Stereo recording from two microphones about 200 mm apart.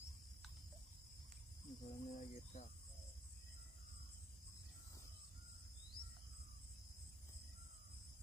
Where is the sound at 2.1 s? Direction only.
45° left (ahead or behind).